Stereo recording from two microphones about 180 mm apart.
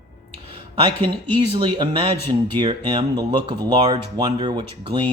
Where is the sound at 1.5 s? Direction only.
25° right (ahead or behind).